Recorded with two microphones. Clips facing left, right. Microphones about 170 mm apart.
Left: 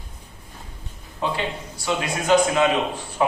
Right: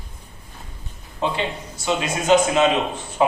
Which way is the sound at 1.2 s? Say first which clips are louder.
Right 2 dB; 20° right (ahead or behind).